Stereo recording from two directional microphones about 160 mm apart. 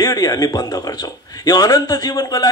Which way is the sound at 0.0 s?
25° left (ahead or behind).